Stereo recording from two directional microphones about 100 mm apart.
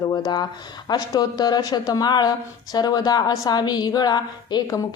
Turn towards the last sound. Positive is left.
turn(degrees=35)  # may be behind; listen again after turning